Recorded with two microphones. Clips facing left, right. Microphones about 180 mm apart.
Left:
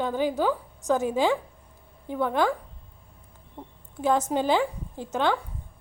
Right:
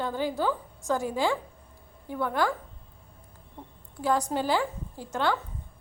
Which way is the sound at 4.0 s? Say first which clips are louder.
Left 3 dB; 20° left (ahead or behind).